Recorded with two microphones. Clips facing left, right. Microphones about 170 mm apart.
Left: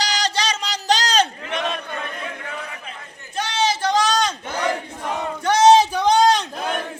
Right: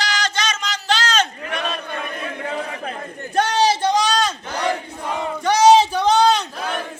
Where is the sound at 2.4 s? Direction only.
35° right (ahead or behind).